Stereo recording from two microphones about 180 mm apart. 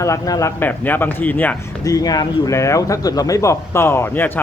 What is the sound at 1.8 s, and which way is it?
Speech, 20° left (ahead or behind).